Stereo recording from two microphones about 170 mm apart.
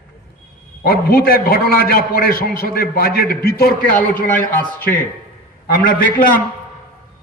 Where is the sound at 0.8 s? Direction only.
65° left (ahead or behind).